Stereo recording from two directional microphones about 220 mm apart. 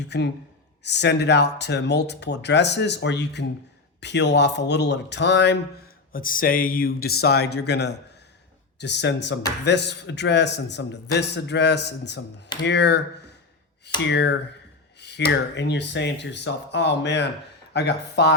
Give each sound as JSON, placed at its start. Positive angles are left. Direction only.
{"t": 0.0, "sound": "speech", "side_deg": 50}
{"t": 6.1, "sound": "speech", "side_deg": 40}